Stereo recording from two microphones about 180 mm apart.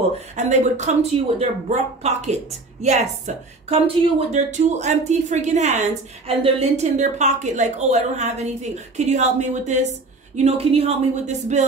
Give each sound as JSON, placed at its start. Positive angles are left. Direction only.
{"t": 0.4, "sound": "a woman's voice", "side_deg": -40}